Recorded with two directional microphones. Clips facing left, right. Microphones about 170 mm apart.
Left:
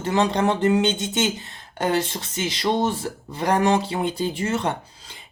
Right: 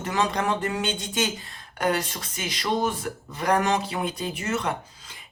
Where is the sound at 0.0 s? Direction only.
30° left (ahead or behind).